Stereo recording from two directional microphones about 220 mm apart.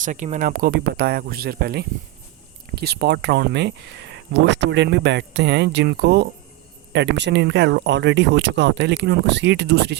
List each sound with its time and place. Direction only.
0.0 s speech: 35° right (ahead or behind); by 10.0 s 50° right (ahead or behind)